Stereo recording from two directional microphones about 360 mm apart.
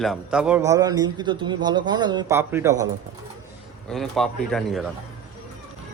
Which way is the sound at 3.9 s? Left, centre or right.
Centre.